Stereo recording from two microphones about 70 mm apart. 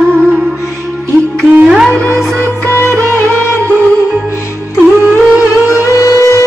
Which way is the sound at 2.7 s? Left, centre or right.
Left.